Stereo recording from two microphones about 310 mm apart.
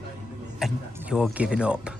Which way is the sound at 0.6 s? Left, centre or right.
Centre.